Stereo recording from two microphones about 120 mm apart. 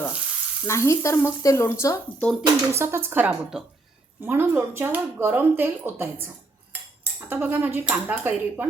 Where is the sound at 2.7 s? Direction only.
20° right (ahead or behind).